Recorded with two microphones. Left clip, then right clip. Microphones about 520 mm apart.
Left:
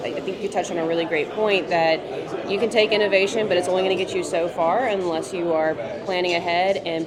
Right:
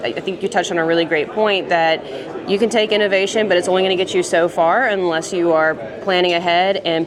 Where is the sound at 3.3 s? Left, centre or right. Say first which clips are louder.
Right 5 dB; right.